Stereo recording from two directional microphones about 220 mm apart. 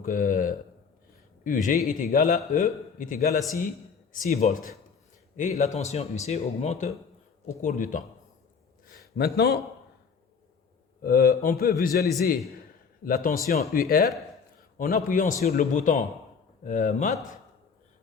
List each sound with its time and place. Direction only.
0.0 s a sound: 40° left (ahead or behind)
1.5 s speech: 35° left (ahead or behind)
9.1 s a man's voice: 45° left (ahead or behind)
11.0 s a man's voice: 45° left (ahead or behind)